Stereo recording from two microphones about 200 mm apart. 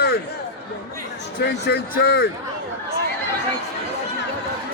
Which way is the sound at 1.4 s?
55° left (ahead or behind).